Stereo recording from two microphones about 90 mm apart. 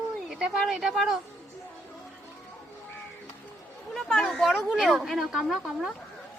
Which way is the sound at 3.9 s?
Centre (ahead or behind).